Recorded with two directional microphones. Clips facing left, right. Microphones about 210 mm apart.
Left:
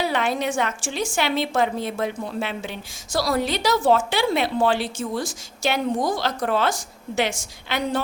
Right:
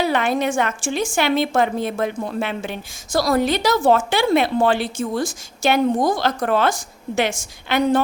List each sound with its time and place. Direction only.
0.0 s a woman's voice: 50° right (ahead or behind)